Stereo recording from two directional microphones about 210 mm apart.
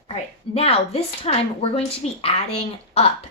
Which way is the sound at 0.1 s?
30° left (ahead or behind).